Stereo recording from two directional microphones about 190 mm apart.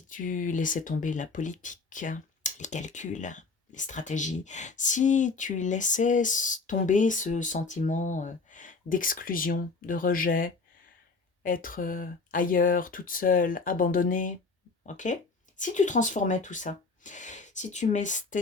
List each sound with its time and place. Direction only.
0.1 s speech: 45° left (ahead or behind)